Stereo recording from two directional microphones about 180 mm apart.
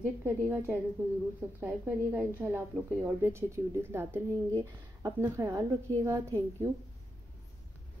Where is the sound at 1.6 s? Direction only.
10° right (ahead or behind).